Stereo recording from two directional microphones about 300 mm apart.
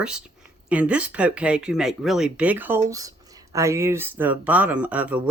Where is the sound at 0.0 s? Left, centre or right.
Centre.